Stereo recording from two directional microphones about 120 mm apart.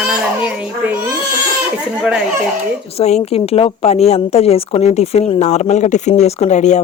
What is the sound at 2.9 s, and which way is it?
Speech, 65° left (ahead or behind).